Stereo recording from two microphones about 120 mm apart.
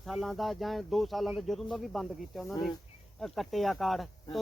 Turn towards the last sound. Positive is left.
turn(degrees=0)  # may be behind; listen again after turning